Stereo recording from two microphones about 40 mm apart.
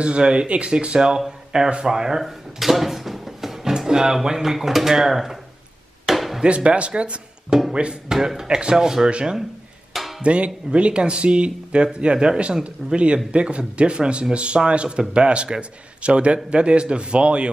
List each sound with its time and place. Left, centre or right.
0.0 s speech: right; by 5.4 s centre
6.0 s chop: centre
6.4 s speech: right
9.9 s music: centre
10.2 s speech: right